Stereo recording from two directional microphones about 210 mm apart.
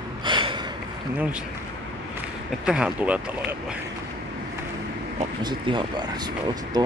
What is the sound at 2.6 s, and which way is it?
Speech, 5° right (ahead or behind).